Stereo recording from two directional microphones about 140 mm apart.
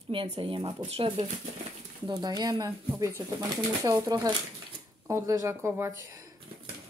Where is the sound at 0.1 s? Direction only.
40° right (ahead or behind).